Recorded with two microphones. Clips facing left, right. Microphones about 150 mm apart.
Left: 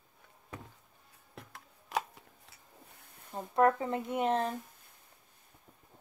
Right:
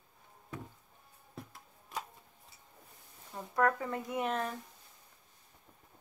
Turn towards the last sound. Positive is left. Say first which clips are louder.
# left 4 dB
turn(degrees=30)  # may be behind; listen again after turning